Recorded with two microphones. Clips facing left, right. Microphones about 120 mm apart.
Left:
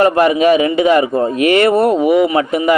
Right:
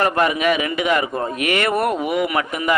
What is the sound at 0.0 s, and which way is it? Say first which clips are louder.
A man's voice: left 7 dB; 30° left (ahead or behind).